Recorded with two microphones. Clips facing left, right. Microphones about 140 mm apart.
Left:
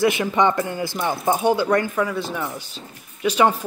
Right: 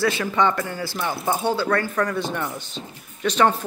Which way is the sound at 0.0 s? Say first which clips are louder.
Left 2 dB; 20° left (ahead or behind).